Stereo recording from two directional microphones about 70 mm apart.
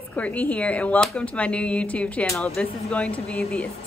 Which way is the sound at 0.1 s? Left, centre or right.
Left.